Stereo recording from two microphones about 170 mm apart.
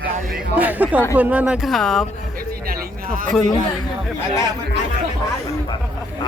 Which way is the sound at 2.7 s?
60° right (ahead or behind).